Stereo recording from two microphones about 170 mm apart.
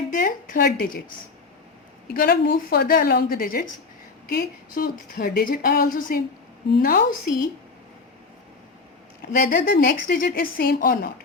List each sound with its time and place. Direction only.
0.1 s a sound: 55° left (ahead or behind)
2.1 s speech: 60° left (ahead or behind)
9.4 s speech: 60° left (ahead or behind)